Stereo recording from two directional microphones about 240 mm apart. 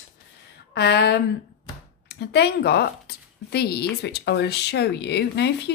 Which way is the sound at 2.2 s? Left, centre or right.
Left.